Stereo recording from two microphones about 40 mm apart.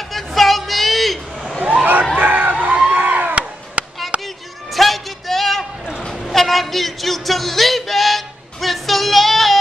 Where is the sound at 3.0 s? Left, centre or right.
Right.